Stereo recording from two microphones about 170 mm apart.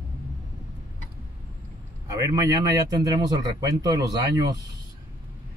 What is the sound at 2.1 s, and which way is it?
Speech, 20° right (ahead or behind).